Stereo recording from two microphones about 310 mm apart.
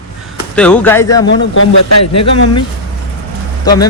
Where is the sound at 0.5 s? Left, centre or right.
Centre.